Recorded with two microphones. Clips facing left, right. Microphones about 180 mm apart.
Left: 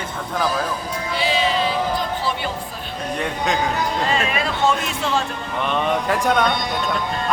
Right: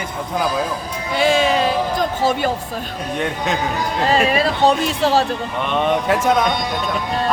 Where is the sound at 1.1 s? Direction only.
50° right (ahead or behind).